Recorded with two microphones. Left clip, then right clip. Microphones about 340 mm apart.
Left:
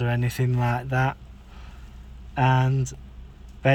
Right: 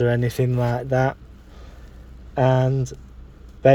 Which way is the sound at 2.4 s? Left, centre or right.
Centre.